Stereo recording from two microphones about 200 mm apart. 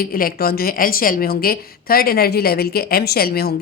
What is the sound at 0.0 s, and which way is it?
A woman's voice, 45° left (ahead or behind).